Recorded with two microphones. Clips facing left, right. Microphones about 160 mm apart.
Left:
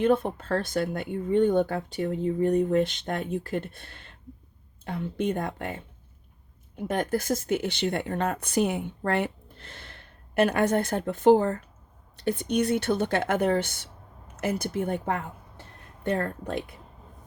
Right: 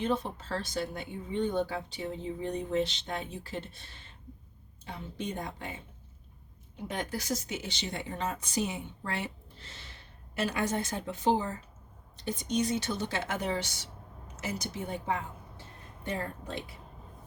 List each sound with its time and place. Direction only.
0.0 s a woman's voice: 55° left (ahead or behind)